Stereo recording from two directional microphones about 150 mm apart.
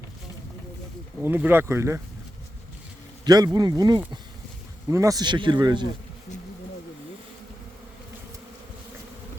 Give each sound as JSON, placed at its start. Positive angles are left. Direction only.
{"t": 1.2, "sound": "speech", "side_deg": -15}
{"t": 3.2, "sound": "speech", "side_deg": -25}